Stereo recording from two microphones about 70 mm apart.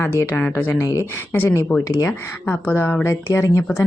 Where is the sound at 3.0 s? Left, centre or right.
Left.